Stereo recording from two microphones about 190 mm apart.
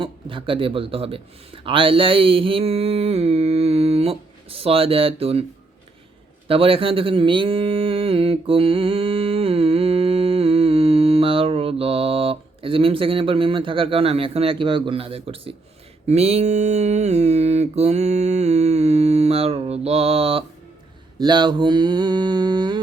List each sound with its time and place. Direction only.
0.0 s speech: 25° right (ahead or behind)
6.5 s speech: 30° right (ahead or behind)
16.0 s mantra: 35° right (ahead or behind)
21.2 s speech: 25° right (ahead or behind)